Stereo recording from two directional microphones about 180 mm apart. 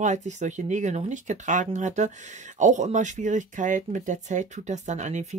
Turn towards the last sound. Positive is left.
turn(degrees=-40)  # may be behind; listen again after turning